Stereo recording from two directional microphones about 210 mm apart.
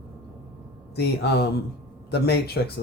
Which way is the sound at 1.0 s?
50° left (ahead or behind).